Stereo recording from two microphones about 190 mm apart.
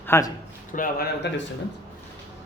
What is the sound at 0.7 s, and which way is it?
Speech, 50° left (ahead or behind).